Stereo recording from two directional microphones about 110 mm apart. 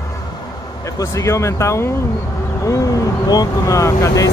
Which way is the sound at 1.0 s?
25° left (ahead or behind).